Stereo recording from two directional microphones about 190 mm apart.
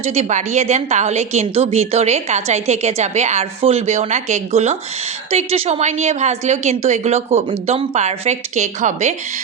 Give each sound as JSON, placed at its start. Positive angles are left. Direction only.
{"t": 0.0, "sound": "a woman's voice", "side_deg": -35}